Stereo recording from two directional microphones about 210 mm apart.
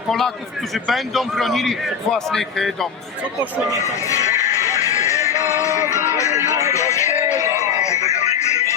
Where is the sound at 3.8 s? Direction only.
15° left (ahead or behind).